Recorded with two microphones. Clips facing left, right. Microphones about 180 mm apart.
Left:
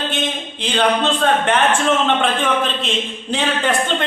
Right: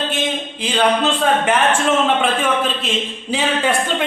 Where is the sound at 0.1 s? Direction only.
5° right (ahead or behind).